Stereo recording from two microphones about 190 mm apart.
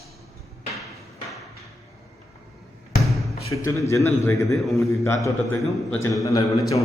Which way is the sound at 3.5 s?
20° left (ahead or behind).